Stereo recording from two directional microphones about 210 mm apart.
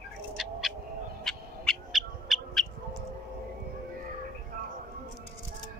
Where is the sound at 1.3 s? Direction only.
Centre (ahead or behind).